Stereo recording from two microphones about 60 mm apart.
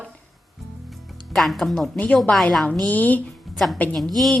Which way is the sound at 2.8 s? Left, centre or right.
Left.